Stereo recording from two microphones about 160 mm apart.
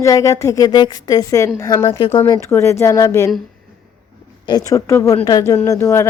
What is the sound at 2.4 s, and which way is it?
Speech, 15° left (ahead or behind).